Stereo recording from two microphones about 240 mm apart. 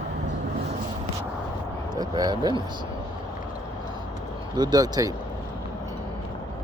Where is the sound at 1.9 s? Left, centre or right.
Centre.